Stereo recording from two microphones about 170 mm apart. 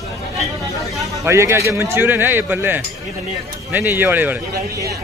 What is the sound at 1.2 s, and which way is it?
Speech, 15° right (ahead or behind).